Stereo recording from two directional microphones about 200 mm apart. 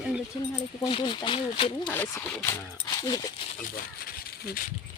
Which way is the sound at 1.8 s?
10° left (ahead or behind).